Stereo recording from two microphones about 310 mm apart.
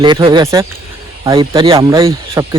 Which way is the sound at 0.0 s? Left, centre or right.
Centre.